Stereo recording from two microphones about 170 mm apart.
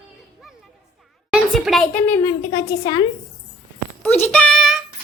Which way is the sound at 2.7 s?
25° left (ahead or behind).